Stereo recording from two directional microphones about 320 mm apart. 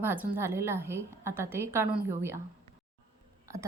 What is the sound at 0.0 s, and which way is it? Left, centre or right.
A woman's voice, centre.